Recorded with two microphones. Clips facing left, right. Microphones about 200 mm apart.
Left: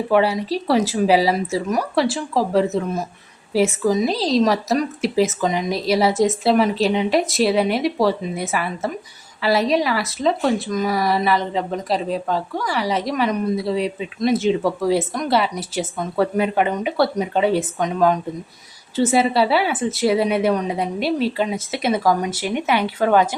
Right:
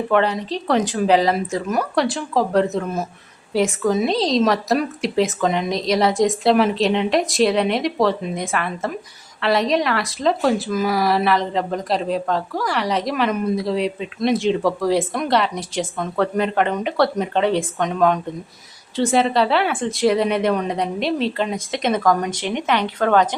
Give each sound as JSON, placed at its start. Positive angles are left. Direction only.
{"t": 0.1, "sound": "speech", "side_deg": 10}